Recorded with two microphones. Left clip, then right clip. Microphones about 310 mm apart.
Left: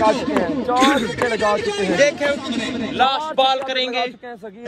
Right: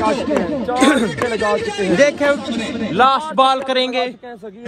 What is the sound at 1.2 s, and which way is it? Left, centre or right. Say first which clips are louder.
Speech: left 2 dB; left.